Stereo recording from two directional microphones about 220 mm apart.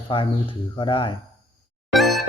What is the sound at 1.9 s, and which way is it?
Music, centre (ahead or behind).